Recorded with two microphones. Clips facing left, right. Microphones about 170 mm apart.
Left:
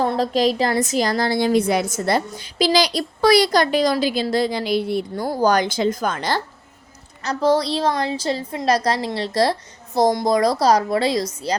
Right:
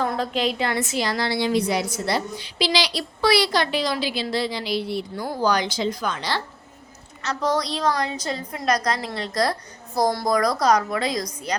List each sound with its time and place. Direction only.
0.0 s a woman's voice: 35° left (ahead or behind)
7.2 s a woman's voice: 30° left (ahead or behind)